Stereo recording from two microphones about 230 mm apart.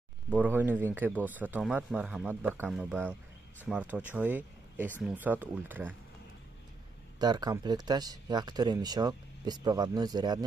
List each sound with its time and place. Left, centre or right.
0.3 s speech: centre
7.2 s speech: centre